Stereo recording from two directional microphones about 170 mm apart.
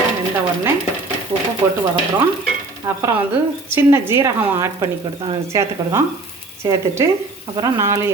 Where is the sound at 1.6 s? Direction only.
15° right (ahead or behind).